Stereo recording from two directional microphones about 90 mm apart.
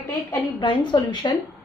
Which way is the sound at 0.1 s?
60° left (ahead or behind).